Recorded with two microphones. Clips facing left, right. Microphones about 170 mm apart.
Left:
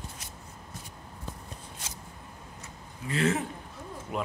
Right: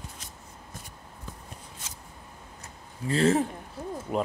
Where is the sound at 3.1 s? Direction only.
35° right (ahead or behind).